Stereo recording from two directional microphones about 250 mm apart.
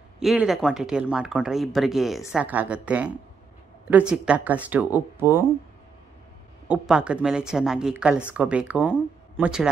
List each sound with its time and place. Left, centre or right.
0.2 s speech: centre
6.7 s speech: centre